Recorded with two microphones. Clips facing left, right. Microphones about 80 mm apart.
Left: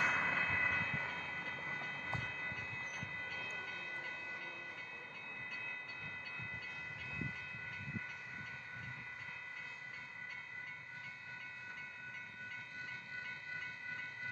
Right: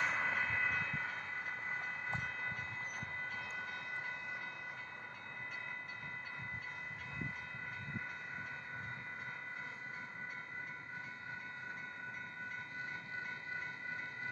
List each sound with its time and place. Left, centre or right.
0.0 s vehicle: centre
0.4 s train: centre
3.3 s train: right